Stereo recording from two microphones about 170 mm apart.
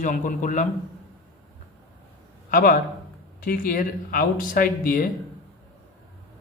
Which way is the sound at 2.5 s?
60° left (ahead or behind).